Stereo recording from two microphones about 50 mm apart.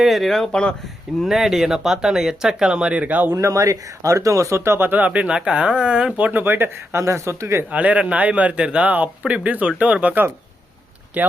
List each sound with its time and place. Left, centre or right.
0.0 s speech: centre; by 3.3 s right
3.3 s speech: right
4.9 s a man's voice: right
6.1 s speech: right
6.9 s speech: right
7.7 s a man's voice: right